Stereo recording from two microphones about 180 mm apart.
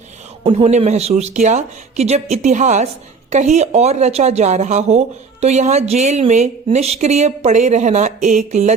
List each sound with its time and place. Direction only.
0.4 s a woman's voice: 35° right (ahead or behind)